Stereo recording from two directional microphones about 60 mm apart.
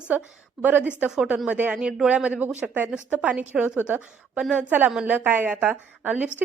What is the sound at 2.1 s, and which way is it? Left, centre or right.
A woman's voice, right.